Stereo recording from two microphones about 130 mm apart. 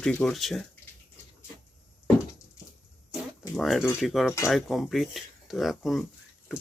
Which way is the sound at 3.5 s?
Centre (ahead or behind).